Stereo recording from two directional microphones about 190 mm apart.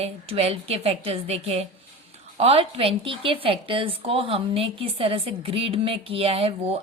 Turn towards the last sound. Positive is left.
turn(degrees=-30)  # may be behind; listen again after turning